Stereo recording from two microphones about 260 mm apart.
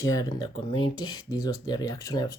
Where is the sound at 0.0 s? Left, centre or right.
Centre.